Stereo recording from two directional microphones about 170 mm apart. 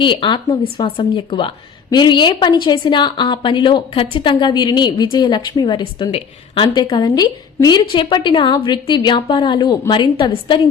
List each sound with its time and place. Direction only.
0.0 s a woman's voice: 30° left (ahead or behind)